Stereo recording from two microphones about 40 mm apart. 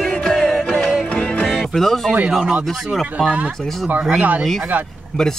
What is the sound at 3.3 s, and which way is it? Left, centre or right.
Speech, right.